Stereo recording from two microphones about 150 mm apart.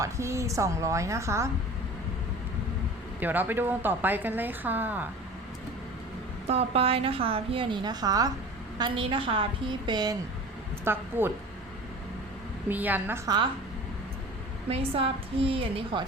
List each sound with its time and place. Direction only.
0.0 s a woman's voice: 20° right (ahead or behind)
3.2 s a woman's voice: 10° right (ahead or behind)
6.5 s a woman's voice: 40° right (ahead or behind)
10.9 s a woman's voice: 15° right (ahead or behind)
12.6 s a woman's voice: 10° right (ahead or behind)
13.2 s a woman's voice: 30° right (ahead or behind)
14.7 s a woman's voice: 40° right (ahead or behind)